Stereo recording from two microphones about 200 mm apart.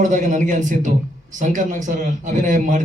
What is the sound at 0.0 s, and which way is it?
Speech, 40° right (ahead or behind).